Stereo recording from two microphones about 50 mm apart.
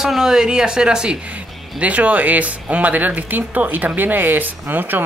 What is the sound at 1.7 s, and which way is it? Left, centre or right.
Speech, right.